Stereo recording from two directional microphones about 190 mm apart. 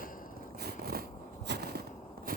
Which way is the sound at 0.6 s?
55° right (ahead or behind).